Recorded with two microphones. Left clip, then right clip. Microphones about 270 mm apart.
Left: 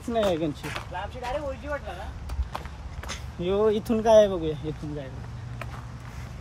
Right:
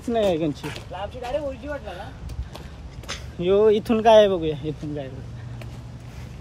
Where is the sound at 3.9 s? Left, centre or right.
Right.